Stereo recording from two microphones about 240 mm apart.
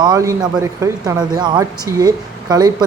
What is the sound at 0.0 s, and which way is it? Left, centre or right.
Speech, centre.